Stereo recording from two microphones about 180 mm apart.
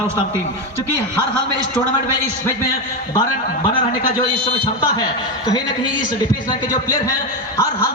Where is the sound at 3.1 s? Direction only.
25° left (ahead or behind).